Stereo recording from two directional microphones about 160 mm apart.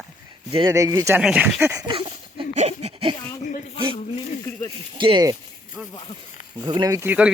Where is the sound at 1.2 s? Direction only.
5° right (ahead or behind).